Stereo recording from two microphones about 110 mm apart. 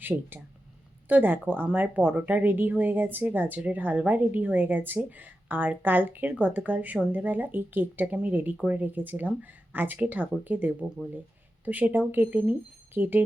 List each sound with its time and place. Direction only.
0.0 s speech: 20° right (ahead or behind)